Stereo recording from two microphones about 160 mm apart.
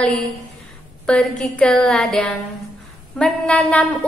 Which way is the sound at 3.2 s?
5° left (ahead or behind).